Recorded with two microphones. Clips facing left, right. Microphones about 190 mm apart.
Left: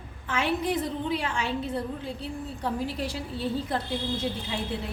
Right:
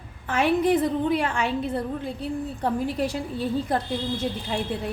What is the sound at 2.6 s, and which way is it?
A woman's voice, 50° right (ahead or behind).